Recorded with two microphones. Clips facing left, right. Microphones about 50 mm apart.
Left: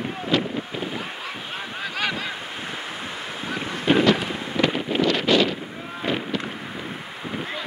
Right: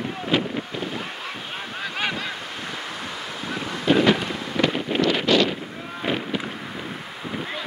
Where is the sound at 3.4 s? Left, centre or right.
Centre.